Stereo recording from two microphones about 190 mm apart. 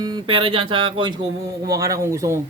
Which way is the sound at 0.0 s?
25° right (ahead or behind).